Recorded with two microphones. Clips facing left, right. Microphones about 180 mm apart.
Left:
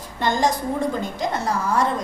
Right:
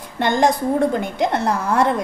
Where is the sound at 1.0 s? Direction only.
65° right (ahead or behind).